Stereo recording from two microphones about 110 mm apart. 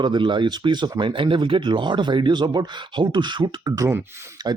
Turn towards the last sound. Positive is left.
turn(degrees=-40)  # may be behind; listen again after turning